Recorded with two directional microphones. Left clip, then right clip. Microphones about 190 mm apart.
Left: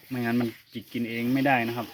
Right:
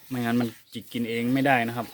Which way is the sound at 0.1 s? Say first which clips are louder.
Right 1 dB; 20° right (ahead or behind).